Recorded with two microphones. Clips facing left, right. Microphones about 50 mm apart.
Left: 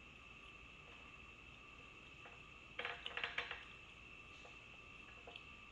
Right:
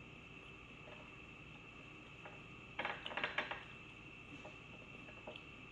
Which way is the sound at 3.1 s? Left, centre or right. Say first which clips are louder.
Right 4 dB; right.